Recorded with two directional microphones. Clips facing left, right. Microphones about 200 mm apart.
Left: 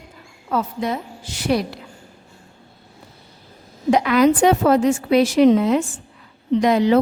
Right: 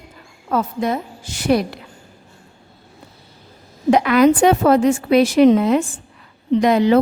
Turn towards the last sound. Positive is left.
turn(degrees=-60)  # may be behind; listen again after turning